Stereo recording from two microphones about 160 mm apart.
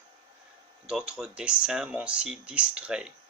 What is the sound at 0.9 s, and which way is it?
Speech, 5° right (ahead or behind).